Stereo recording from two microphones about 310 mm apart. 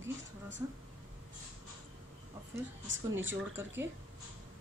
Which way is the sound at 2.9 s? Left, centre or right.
Right.